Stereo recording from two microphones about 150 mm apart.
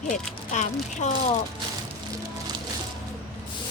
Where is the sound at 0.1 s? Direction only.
55° left (ahead or behind).